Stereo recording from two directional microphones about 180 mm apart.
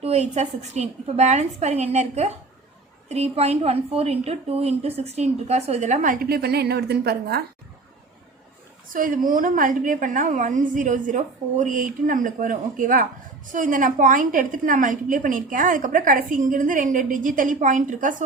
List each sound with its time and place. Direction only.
0.0 s a woman's voice: 35° right (ahead or behind); by 7.4 s 60° right (ahead or behind)
8.9 s a woman's voice: 50° right (ahead or behind)